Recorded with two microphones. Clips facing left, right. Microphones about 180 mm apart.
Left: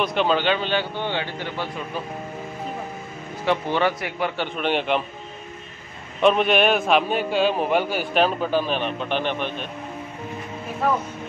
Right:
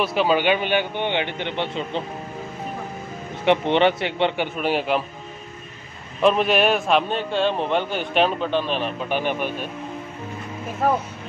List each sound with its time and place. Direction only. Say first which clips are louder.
0.0 s a man's voice: right 1 dB; 5° right (ahead or behind); by 2.0 s 25° right (ahead or behind)
3.4 s a man's voice: right 4 dB; 25° right (ahead or behind)
4.4 s a man's voice: right 1 dB; 5° right (ahead or behind)
6.2 s a man's voice: even; centre (ahead or behind)